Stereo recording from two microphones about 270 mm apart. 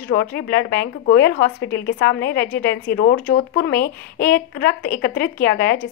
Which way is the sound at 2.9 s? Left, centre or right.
Left.